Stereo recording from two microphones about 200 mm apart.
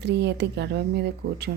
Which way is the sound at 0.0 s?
60° right (ahead or behind).